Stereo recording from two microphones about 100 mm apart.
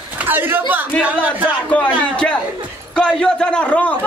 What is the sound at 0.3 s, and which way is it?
Speech, 20° right (ahead or behind).